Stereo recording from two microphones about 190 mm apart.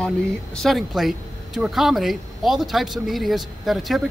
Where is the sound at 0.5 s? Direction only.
Centre (ahead or behind).